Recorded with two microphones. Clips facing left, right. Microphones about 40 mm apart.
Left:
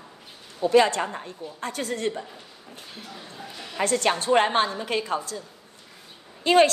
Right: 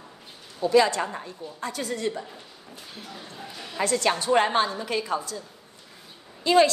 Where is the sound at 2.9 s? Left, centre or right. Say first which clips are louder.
Right 1 dB; centre.